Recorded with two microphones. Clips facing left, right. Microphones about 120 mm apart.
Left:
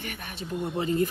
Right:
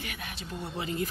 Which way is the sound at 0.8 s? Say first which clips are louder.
Left 7 dB; 40° left (ahead or behind).